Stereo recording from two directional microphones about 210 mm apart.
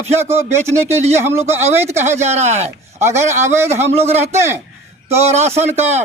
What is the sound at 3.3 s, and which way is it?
Speech, 10° right (ahead or behind).